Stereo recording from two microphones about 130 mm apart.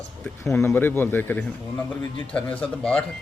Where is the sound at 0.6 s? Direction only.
15° left (ahead or behind).